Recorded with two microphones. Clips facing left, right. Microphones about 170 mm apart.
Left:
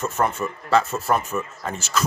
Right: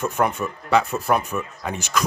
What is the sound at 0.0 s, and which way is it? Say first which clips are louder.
A man's voice: right 1 dB; 15° right (ahead or behind).